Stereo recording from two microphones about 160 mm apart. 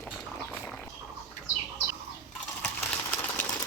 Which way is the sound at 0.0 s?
5° left (ahead or behind).